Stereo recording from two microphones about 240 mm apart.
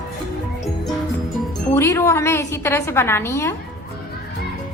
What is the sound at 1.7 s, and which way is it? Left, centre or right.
A woman's voice, centre.